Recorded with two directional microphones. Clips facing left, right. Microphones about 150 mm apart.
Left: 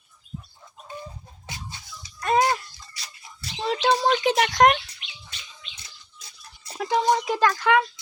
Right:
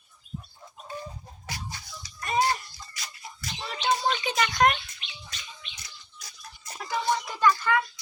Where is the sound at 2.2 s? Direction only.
80° left.